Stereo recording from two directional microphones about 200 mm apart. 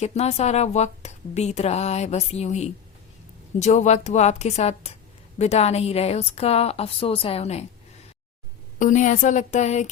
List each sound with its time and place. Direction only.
0.0 s speech: 35° left (ahead or behind)
8.8 s speech: 40° left (ahead or behind)